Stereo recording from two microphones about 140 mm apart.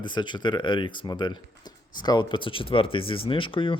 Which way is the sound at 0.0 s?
35° left (ahead or behind).